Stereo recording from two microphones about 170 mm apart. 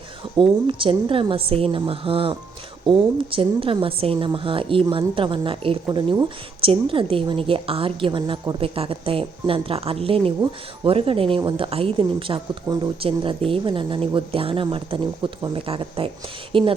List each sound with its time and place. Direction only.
0.7 s a woman's voice: 30° right (ahead or behind)